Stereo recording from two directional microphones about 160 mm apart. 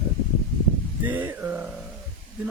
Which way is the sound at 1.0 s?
10° right (ahead or behind).